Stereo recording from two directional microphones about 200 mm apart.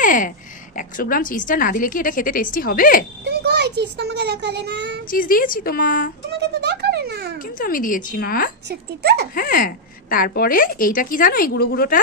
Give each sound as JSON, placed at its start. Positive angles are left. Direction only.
{"t": 0.0, "sound": "a woman's voice", "side_deg": 40}
{"t": 3.3, "sound": "a child's voice", "side_deg": -55}
{"t": 5.1, "sound": "a woman's voice", "side_deg": 45}
{"t": 6.6, "sound": "speech", "side_deg": -55}
{"t": 7.5, "sound": "a woman's voice", "side_deg": 45}
{"t": 8.6, "sound": "a child's voice", "side_deg": -55}
{"t": 9.3, "sound": "a woman's voice", "side_deg": 45}